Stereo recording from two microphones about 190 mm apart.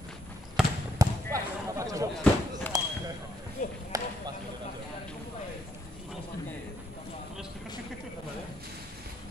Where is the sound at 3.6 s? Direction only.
40° left (ahead or behind).